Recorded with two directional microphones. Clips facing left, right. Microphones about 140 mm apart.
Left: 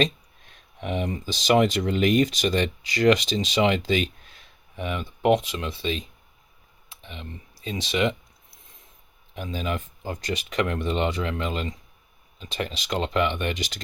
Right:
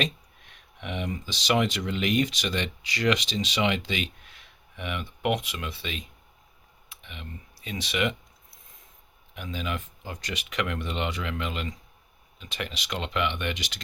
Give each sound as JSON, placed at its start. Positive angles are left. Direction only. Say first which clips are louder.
{"t": 0.0, "sound": "speech", "louder": "left 6 dB", "side_deg": 35}
{"t": 9.3, "sound": "speech", "louder": "left 4 dB", "side_deg": 35}